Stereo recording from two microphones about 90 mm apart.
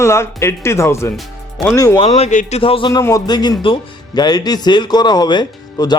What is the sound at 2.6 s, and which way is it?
Speech, 90° left.